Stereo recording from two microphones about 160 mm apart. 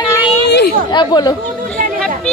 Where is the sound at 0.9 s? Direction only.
25° left (ahead or behind).